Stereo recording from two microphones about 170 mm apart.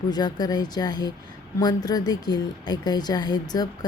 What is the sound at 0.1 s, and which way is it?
A woman's voice, 25° left (ahead or behind).